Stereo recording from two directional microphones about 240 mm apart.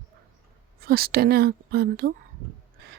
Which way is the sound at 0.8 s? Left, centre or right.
Right.